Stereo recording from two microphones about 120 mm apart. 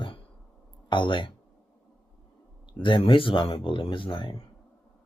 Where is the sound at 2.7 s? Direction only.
45° left (ahead or behind).